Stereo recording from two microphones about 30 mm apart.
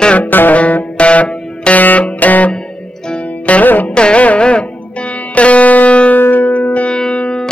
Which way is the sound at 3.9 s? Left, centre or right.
Left.